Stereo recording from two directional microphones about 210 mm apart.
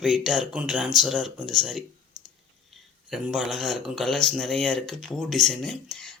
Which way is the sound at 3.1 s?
Centre (ahead or behind).